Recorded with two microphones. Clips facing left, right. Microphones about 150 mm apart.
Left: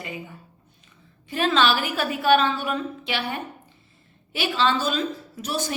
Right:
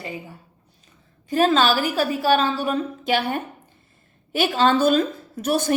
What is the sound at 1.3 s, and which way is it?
A woman's voice, 40° right (ahead or behind).